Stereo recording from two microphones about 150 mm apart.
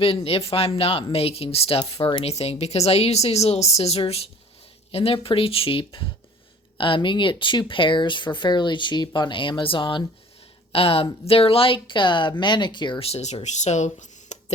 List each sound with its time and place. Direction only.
0.0 s a woman's voice: 40° left (ahead or behind)
2.2 s a woman's voice: 45° left (ahead or behind)